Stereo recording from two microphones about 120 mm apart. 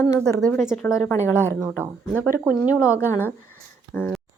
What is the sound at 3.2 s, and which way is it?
Speech, 20° left (ahead or behind).